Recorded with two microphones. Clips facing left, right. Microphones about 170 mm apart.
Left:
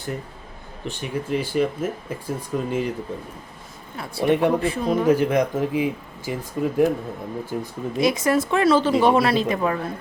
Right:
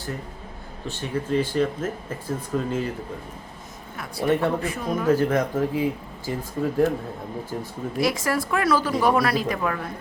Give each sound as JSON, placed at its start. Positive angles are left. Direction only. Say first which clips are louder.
{"t": 0.9, "sound": "speech", "louder": "even", "side_deg": 15}
{"t": 3.9, "sound": "speech", "louder": "left 2 dB", "side_deg": 25}
{"t": 4.6, "sound": "speech", "louder": "left 5 dB", "side_deg": 30}
{"t": 5.0, "sound": "speech", "louder": "even", "side_deg": 15}